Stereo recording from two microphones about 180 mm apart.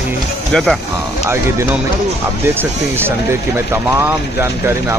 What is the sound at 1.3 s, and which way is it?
Speech, 15° right (ahead or behind).